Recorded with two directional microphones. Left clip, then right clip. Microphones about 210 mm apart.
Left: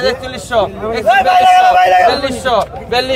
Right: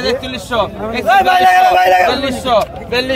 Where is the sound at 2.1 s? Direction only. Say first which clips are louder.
Even; 30° left (ahead or behind).